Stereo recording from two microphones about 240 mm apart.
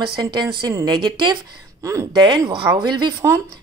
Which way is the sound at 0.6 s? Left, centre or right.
Centre.